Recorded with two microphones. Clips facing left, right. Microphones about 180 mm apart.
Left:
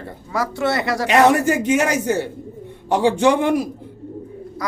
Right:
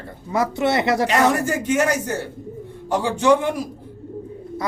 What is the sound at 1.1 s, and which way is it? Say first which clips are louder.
A man's voice: left 4 dB; 85° left.